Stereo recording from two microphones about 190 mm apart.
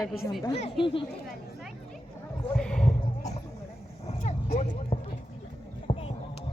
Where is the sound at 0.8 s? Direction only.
25° left (ahead or behind).